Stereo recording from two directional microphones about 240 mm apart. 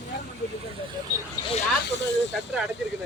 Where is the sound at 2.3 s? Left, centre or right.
Centre.